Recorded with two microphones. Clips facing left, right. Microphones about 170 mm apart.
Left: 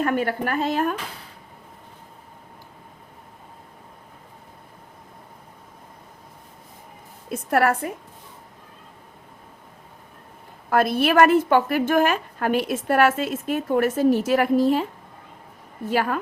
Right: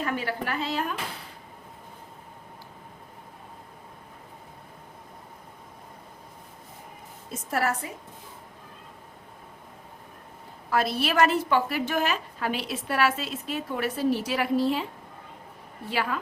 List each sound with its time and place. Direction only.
0.0 s a woman's voice: 50° left (ahead or behind)
7.3 s a woman's voice: 60° left (ahead or behind)
10.7 s a woman's voice: 55° left (ahead or behind)
15.9 s a woman's voice: 50° left (ahead or behind)